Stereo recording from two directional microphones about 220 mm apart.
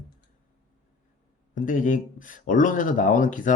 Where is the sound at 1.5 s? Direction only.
35° left (ahead or behind).